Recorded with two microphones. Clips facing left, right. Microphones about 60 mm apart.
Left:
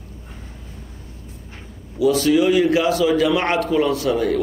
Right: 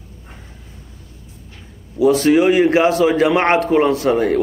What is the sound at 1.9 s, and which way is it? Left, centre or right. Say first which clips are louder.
A man's voice: right 3 dB; right.